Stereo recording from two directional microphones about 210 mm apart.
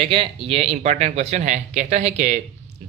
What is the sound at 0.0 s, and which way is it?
Speech, 25° right (ahead or behind).